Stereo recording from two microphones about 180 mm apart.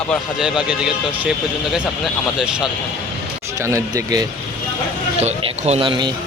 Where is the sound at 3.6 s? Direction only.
20° right (ahead or behind).